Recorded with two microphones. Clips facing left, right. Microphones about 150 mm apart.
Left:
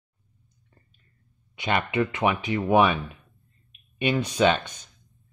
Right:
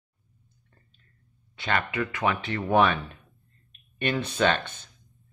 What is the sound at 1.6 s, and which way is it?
Speech, 15° left (ahead or behind).